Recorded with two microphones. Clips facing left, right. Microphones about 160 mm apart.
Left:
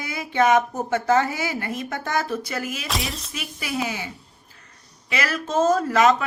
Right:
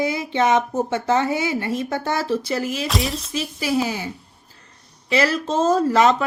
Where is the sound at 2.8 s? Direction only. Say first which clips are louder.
Right 5 dB; centre (ahead or behind).